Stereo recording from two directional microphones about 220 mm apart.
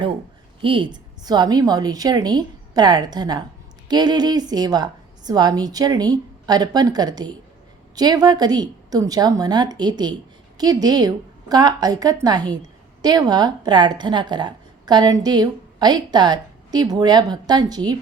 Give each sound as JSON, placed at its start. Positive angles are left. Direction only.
{"t": 0.6, "sound": "a woman's voice", "side_deg": -25}